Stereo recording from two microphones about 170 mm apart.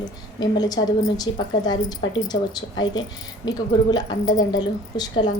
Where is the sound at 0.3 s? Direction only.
25° left (ahead or behind).